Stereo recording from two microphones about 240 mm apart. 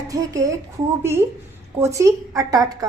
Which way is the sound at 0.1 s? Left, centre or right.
Centre.